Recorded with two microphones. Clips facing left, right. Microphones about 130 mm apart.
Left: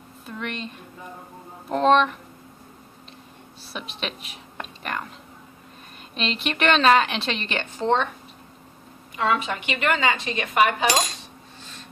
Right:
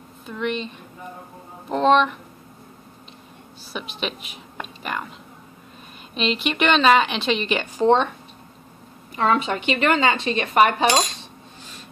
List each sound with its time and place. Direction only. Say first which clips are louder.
0.3 s a woman's voice: right 6 dB; centre (ahead or behind)
3.7 s a woman's voice: right 3 dB; centre (ahead or behind)
6.1 s a woman's voice: right 4 dB; centre (ahead or behind)
9.1 s speech: right 3 dB; 35° right (ahead or behind)